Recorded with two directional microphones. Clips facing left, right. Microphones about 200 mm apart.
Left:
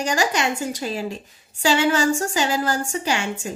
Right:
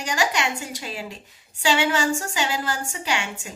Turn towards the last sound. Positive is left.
turn(degrees=40)  # may be behind; listen again after turning